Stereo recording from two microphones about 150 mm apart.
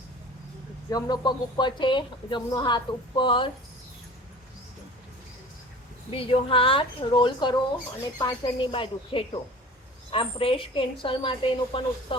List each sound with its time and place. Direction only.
0.9 s speech: 25° left (ahead or behind)
6.1 s speech: 40° left (ahead or behind)